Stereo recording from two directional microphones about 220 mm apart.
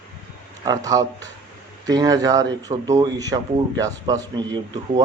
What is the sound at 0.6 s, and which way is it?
Speech, 15° right (ahead or behind).